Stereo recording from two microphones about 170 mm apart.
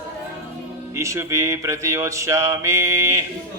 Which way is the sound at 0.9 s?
15° right (ahead or behind).